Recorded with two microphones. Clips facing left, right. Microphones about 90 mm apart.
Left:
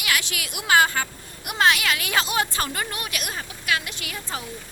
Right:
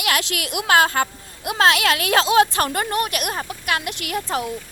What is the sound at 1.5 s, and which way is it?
A woman's voice, 90° right.